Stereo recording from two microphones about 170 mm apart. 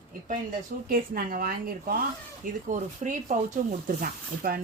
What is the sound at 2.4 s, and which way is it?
Speech, 45° right (ahead or behind).